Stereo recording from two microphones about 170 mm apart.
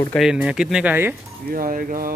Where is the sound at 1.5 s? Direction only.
55° right (ahead or behind).